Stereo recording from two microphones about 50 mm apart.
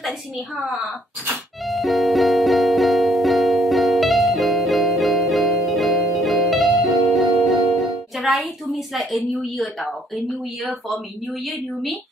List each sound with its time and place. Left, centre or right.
1.7 s music: centre
8.3 s a sound: centre
9.4 s a woman's voice: centre